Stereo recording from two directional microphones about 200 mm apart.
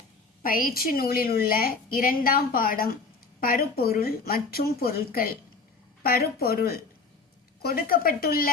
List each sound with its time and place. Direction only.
0.4 s a woman's voice: 45° left (ahead or behind)